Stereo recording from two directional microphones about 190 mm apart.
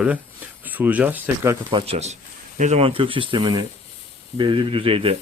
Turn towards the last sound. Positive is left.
turn(degrees=-30)  # may be behind; listen again after turning